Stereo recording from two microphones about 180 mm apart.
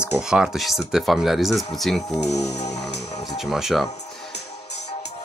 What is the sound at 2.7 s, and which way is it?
Music, 70° left (ahead or behind).